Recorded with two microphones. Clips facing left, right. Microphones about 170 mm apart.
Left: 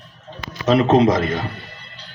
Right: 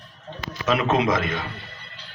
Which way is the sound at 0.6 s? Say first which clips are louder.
Left 7 dB; 35° left (ahead or behind).